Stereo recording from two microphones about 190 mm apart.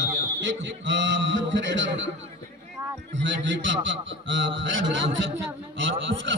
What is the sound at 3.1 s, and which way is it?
A man's voice, 70° right (ahead or behind).